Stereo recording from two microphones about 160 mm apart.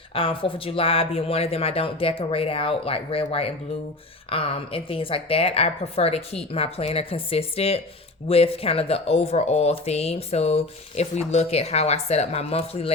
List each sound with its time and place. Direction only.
0.1 s speech: 35° left (ahead or behind)